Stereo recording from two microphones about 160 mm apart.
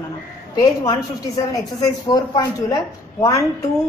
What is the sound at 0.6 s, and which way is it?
A woman's voice, 25° left (ahead or behind).